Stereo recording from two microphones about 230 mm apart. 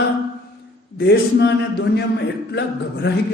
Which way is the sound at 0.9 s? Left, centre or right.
Left.